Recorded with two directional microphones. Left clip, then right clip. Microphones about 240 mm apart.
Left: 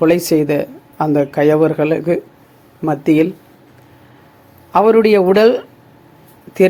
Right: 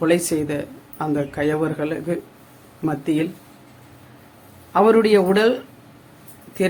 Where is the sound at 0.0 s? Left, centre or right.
Left.